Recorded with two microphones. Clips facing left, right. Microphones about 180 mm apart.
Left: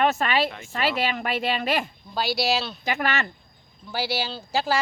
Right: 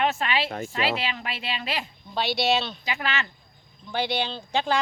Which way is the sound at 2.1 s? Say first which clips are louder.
Even; centre (ahead or behind).